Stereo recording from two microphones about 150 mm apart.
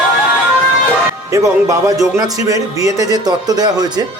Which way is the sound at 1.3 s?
20° right (ahead or behind).